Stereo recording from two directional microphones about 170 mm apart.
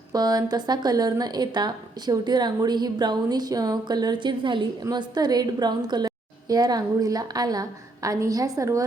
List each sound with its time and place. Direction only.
0.1 s speech: 20° right (ahead or behind)